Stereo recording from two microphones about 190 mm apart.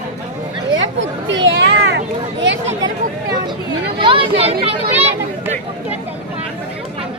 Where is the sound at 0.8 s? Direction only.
75° right (ahead or behind).